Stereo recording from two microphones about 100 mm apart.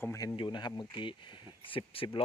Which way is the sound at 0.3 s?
50° left (ahead or behind).